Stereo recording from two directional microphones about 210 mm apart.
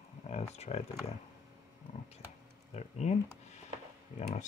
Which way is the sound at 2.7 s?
30° left (ahead or behind).